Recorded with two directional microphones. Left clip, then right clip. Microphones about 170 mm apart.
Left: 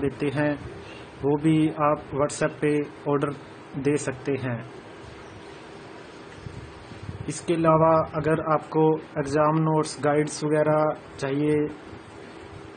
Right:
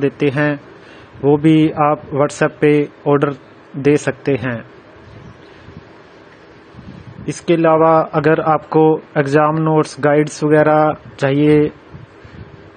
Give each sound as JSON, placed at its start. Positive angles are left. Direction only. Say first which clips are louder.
{"t": 0.0, "sound": "a man's voice", "louder": "right 10 dB", "side_deg": -40}
{"t": 7.2, "sound": "a man's voice", "louder": "right 9 dB", "side_deg": -35}